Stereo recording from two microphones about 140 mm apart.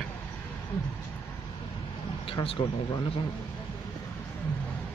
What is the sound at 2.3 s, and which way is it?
Speech, 40° left (ahead or behind).